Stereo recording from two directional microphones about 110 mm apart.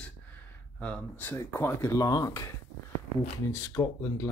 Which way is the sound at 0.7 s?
10° left (ahead or behind).